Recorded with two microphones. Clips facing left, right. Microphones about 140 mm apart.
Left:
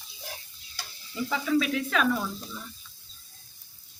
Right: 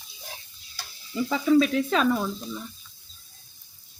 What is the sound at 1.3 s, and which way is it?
Speech, 35° right (ahead or behind).